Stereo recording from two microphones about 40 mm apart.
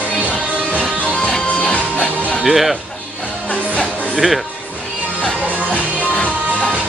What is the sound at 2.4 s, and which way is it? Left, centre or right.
Speech, centre.